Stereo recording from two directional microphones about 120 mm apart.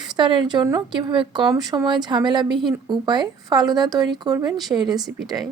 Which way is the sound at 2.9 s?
40° right (ahead or behind).